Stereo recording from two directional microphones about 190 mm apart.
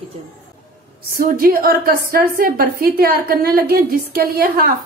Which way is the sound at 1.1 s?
50° right (ahead or behind).